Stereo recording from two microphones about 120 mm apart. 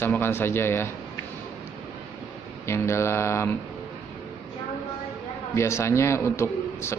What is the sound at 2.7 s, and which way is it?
Speech, 25° left (ahead or behind).